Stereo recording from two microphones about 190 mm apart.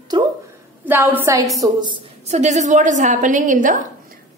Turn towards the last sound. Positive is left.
turn(degrees=-45)  # may be behind; listen again after turning